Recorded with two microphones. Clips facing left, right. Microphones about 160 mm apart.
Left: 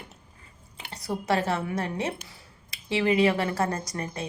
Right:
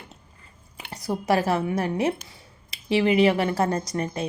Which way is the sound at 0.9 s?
30° right (ahead or behind).